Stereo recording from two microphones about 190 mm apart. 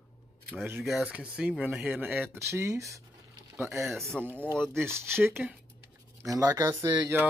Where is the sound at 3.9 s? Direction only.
Centre (ahead or behind).